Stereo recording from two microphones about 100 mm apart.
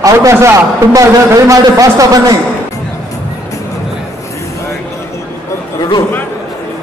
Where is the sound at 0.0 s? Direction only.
30° right (ahead or behind).